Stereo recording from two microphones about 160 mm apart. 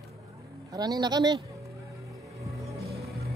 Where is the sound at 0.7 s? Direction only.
25° right (ahead or behind).